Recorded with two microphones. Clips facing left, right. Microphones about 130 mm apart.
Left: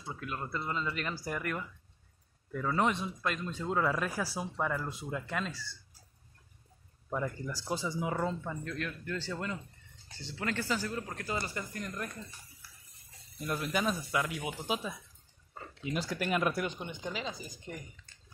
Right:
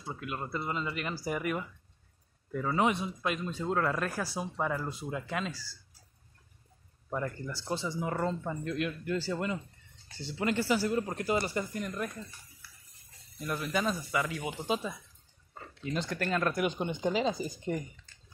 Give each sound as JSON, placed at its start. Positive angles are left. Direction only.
{"t": 0.0, "sound": "speech", "side_deg": -5}
{"t": 7.1, "sound": "speech", "side_deg": 0}
{"t": 8.5, "sound": "speech", "side_deg": -15}
{"t": 10.9, "sound": "speech", "side_deg": -25}
{"t": 13.6, "sound": "speech", "side_deg": 5}
{"t": 16.7, "sound": "speech", "side_deg": -25}